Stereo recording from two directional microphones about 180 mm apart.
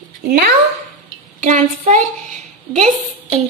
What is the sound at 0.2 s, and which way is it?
Speech, 55° right (ahead or behind).